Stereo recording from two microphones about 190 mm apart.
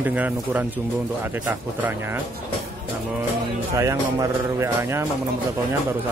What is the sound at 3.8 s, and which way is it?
Speech, 15° right (ahead or behind).